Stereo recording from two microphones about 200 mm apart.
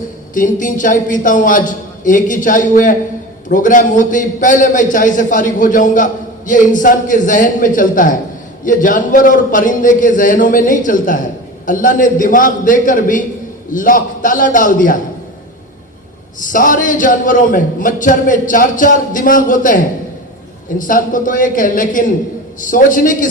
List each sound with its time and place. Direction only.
0.3 s a man's voice: 40° left (ahead or behind)
16.5 s a man's voice: 40° left (ahead or behind)